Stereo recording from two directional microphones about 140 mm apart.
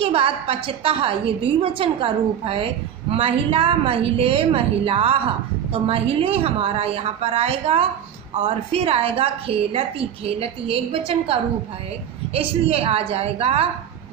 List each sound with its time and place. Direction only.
0.0 s a woman's voice: 45° right (ahead or behind)